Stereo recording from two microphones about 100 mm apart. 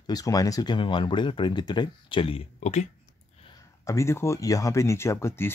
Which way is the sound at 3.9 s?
30° left (ahead or behind).